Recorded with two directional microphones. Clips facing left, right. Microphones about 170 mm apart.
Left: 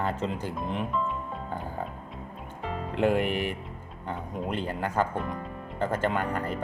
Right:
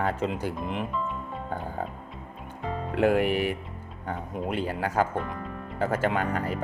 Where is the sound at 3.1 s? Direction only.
10° right (ahead or behind).